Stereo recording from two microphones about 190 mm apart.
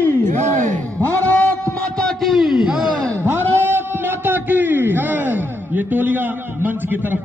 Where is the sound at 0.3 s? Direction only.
40° right (ahead or behind).